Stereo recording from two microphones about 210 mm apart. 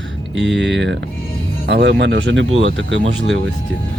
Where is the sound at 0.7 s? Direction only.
55° right (ahead or behind).